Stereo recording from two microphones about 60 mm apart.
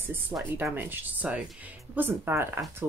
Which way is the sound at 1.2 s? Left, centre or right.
Right.